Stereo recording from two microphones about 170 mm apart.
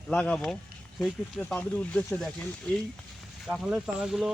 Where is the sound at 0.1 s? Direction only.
5° left (ahead or behind).